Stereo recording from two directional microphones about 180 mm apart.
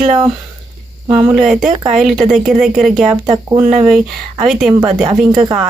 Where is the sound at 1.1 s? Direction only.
10° right (ahead or behind).